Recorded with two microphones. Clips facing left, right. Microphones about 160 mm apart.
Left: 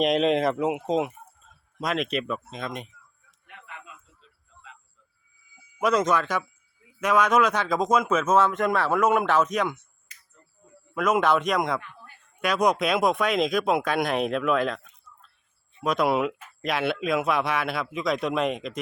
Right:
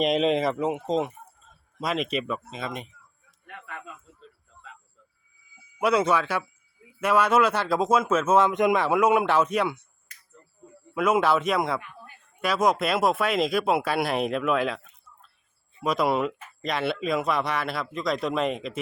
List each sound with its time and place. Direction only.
0.0 s a man's voice: centre (ahead or behind)
3.4 s a sound: 55° right (ahead or behind)
5.8 s speech: 10° right (ahead or behind)
10.9 s a man's voice: 5° right (ahead or behind)